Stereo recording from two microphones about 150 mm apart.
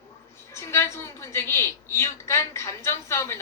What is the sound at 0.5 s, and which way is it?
A woman's voice, 15° left (ahead or behind).